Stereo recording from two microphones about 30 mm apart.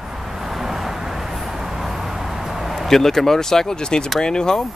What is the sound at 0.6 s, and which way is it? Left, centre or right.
Vehicle, centre.